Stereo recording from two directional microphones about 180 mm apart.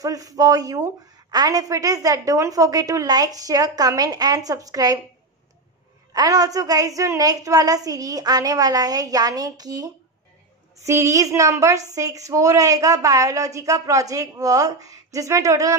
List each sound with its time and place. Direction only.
0.0 s a woman's voice: 20° right (ahead or behind)
6.1 s a woman's voice: 20° right (ahead or behind)